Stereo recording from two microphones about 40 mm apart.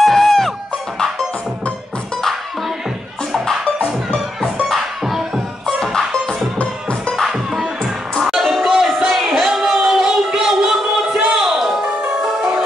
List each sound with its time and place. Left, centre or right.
0.0 s music: centre
4.6 s music: centre
6.6 s music: left
8.2 s music: centre
11.5 s music: centre